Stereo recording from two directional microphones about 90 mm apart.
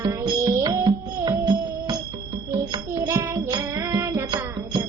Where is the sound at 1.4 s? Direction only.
55° right (ahead or behind).